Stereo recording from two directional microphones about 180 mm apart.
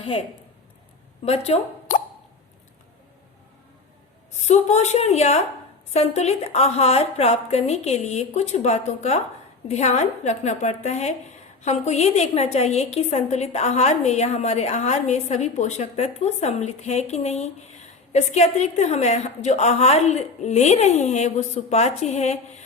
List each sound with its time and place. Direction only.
1.2 s speech: 35° left (ahead or behind)
4.3 s a woman's voice: 40° left (ahead or behind)